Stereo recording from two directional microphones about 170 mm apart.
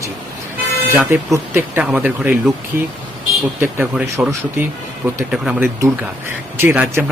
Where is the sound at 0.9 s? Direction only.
15° right (ahead or behind).